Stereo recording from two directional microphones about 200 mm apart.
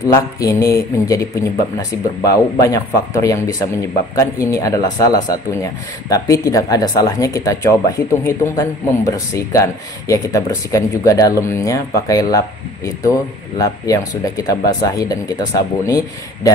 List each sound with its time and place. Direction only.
0.1 s a man's voice: 15° left (ahead or behind)